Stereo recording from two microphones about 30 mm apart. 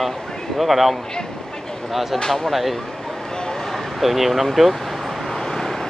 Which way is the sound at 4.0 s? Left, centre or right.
Centre.